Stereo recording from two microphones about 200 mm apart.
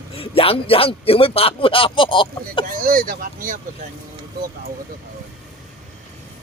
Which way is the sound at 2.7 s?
45° right (ahead or behind).